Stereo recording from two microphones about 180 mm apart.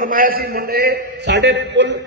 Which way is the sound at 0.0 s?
50° right (ahead or behind).